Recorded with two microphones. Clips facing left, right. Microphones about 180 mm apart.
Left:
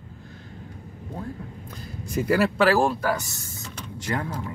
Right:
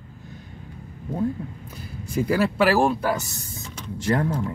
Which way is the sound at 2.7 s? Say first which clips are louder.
Right 1 dB; 15° right (ahead or behind).